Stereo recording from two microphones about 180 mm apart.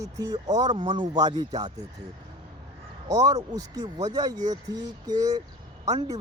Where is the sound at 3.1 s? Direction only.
20° right (ahead or behind).